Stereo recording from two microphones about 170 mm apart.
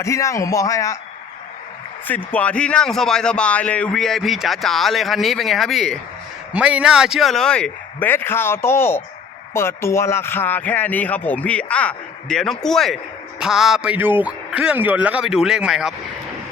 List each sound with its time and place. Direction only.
0.0 s speech: 20° left (ahead or behind)
2.0 s a man's voice: 10° left (ahead or behind)